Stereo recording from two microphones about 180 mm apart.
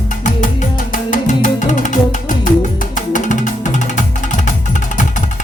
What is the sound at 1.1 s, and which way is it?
Music, 45° left (ahead or behind).